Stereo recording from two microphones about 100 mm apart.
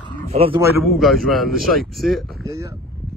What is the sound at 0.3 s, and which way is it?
Speech, 80° right.